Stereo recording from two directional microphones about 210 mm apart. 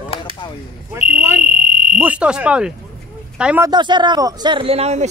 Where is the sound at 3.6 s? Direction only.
20° right (ahead or behind).